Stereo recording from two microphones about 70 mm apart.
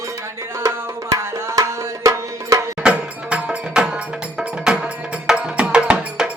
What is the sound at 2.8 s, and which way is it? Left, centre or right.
Music, centre.